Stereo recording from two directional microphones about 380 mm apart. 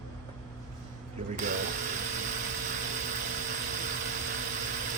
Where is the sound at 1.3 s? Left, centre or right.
Centre.